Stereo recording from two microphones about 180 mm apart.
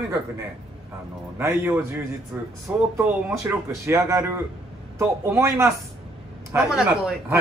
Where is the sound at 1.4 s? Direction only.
10° right (ahead or behind).